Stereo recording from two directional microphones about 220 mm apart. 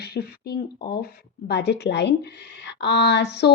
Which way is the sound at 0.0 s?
45° left (ahead or behind).